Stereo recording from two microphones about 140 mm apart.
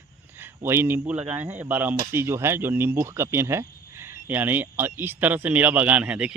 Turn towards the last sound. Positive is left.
turn(degrees=-10)  # may be behind; listen again after turning